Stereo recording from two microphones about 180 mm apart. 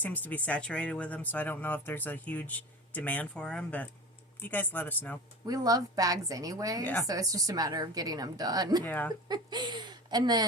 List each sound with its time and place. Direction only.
0.0 s speech: 10° left (ahead or behind)
5.5 s a woman's voice: 20° right (ahead or behind)
8.8 s speech: 10° left (ahead or behind)
9.3 s speech: 25° right (ahead or behind)